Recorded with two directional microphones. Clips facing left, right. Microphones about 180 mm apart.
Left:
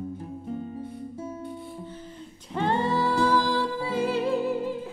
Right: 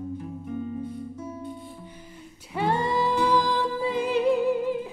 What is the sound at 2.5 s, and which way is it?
Music, 10° right (ahead or behind).